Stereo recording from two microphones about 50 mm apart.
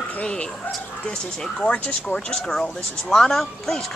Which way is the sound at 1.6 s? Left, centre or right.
Left.